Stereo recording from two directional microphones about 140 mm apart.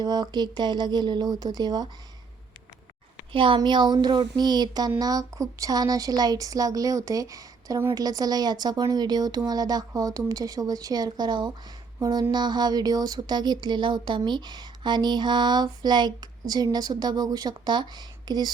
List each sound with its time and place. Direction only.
0.0 s speech: 30° right (ahead or behind)
3.3 s a woman's voice: 35° right (ahead or behind)